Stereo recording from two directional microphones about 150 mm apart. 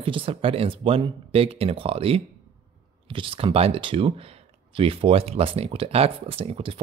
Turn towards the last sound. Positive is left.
turn(degrees=-40)  # may be behind; listen again after turning